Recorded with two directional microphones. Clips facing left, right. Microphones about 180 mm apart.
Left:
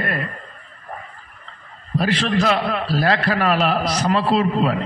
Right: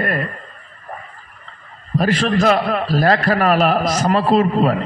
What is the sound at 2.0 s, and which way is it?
A man's voice, 45° right (ahead or behind).